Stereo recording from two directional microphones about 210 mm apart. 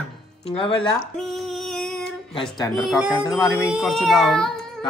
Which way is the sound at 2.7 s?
Centre (ahead or behind).